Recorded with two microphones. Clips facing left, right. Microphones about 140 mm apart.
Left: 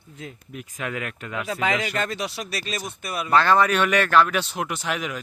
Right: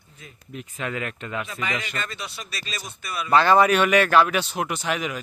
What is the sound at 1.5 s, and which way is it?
Speech, 90° left.